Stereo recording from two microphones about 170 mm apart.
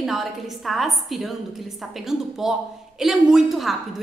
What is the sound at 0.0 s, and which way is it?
A woman's voice, centre (ahead or behind).